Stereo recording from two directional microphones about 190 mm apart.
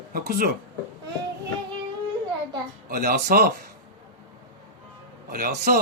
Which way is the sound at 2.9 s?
45° right (ahead or behind).